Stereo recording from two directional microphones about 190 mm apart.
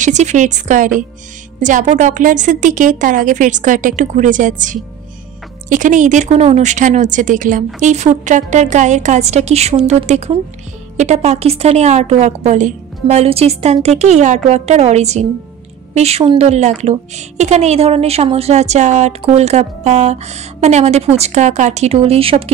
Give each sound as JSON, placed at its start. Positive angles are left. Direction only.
{"t": 0.0, "sound": "a woman's voice", "side_deg": -40}